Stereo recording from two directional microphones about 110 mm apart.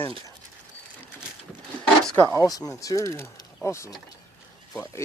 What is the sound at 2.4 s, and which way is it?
Speech, 35° left (ahead or behind).